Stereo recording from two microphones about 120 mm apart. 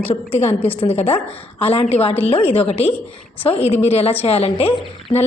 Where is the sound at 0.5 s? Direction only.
15° left (ahead or behind).